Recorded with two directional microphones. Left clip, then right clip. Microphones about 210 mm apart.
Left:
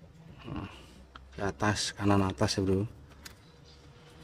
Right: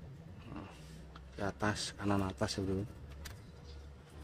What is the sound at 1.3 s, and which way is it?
Speech, 45° left (ahead or behind).